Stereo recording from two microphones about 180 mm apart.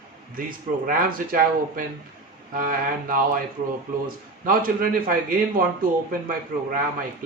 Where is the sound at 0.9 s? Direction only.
50° right (ahead or behind).